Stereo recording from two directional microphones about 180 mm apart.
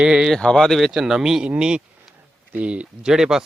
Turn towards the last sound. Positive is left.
turn(degrees=-5)  # may be behind; listen again after turning